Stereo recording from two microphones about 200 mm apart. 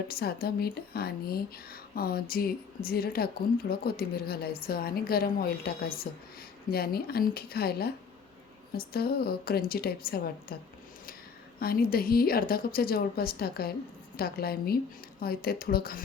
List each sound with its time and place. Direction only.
0.1 s speech: 50° left (ahead or behind)